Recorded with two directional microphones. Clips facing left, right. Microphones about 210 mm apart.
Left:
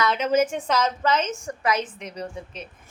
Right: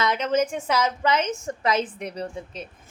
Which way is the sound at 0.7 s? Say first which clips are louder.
Even; 10° right (ahead or behind).